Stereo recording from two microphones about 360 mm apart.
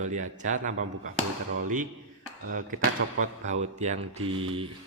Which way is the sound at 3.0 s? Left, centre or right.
Right.